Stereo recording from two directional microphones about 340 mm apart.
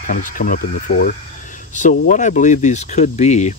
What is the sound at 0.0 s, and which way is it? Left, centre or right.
Speech, left.